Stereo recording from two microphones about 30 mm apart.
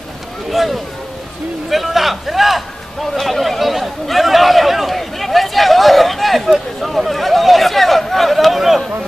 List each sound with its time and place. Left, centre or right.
0.5 s speech: centre
8.5 s speech: centre